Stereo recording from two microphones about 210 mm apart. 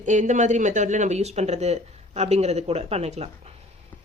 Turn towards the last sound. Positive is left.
turn(degrees=-30)  # may be behind; listen again after turning